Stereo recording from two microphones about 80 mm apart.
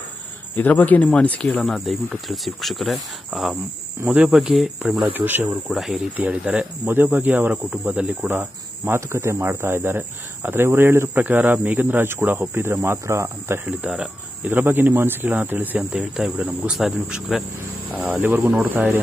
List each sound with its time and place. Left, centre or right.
0.6 s speech: left
1.7 s a man's voice: centre; by 5.4 s right
5.7 s speech: centre
6.1 s a man's voice: centre
13.0 s speech: right
13.7 s a man's voice: centre
16.6 s speech: centre
17.9 s a man's voice: right